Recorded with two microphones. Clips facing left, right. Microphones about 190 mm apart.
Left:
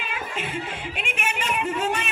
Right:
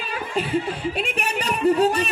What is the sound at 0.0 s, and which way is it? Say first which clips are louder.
A woman's voice: right 5 dB; 40° right (ahead or behind).